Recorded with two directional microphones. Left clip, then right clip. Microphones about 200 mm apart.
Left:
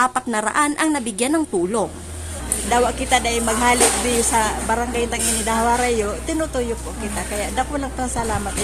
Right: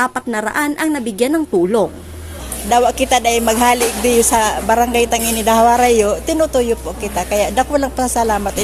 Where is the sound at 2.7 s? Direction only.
50° right (ahead or behind).